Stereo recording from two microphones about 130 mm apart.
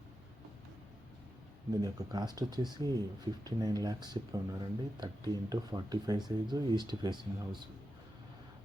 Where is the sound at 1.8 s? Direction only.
30° right (ahead or behind).